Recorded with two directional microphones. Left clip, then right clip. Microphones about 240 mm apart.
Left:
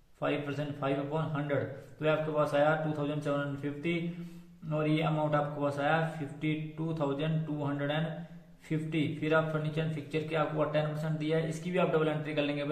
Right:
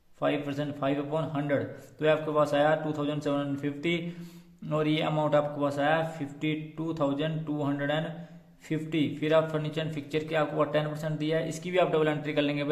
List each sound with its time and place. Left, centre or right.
0.2 s a man's voice: right